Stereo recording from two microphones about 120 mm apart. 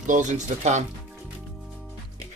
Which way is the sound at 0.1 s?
90° right.